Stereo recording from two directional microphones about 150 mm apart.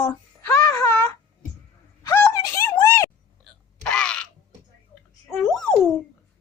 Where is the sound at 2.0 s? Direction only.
20° left (ahead or behind).